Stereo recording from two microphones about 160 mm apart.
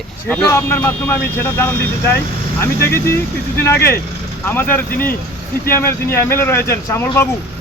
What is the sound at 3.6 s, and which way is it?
Speech, 15° left (ahead or behind).